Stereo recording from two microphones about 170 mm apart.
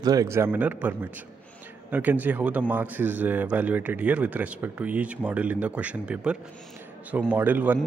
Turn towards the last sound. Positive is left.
turn(degrees=-10)  # may be behind; listen again after turning